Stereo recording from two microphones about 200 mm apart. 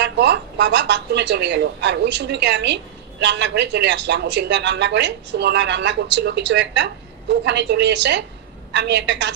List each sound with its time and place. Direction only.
0.0 s a woman's voice: 60° right (ahead or behind)